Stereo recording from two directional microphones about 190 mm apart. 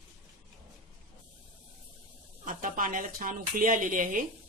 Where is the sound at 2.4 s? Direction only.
45° right (ahead or behind).